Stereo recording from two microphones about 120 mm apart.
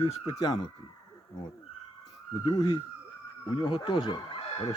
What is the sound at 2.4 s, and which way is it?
Speech, 40° left (ahead or behind).